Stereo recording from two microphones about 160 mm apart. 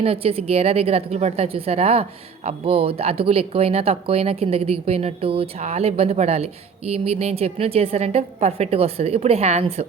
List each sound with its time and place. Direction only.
0.0 s a woman's voice: 40° right (ahead or behind)